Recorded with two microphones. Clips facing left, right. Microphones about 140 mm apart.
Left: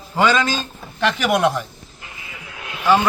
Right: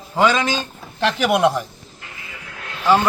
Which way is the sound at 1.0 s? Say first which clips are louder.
Right 1 dB; 5° right (ahead or behind).